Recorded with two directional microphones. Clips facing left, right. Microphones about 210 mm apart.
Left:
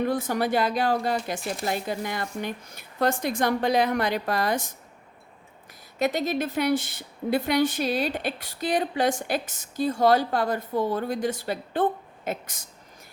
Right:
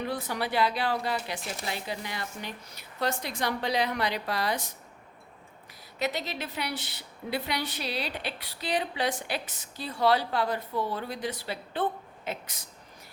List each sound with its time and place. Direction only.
0.0 s a woman's voice: 50° left (ahead or behind)
6.0 s a woman's voice: 50° left (ahead or behind)